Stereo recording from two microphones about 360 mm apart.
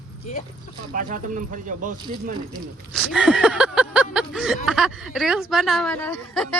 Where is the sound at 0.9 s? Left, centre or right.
Right.